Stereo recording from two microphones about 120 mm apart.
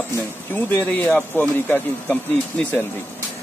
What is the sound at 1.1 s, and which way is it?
Speech, 5° left (ahead or behind).